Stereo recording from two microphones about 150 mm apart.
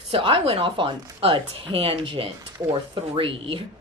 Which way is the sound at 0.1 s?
40° right (ahead or behind).